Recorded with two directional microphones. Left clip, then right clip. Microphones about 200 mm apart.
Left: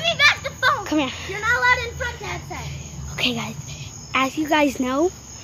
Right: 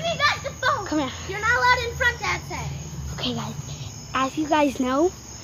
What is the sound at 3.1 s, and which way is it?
A woman's voice, 15° left (ahead or behind).